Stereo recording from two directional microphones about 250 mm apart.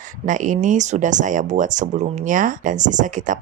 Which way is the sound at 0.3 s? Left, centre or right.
Right.